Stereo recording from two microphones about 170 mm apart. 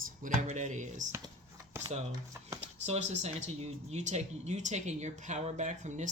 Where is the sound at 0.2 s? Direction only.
45° right (ahead or behind).